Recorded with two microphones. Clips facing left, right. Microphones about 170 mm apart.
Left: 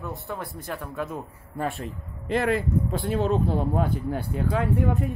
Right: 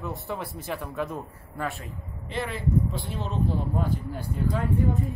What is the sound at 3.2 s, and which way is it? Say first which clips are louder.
Speech: left 3 dB; 55° left (ahead or behind).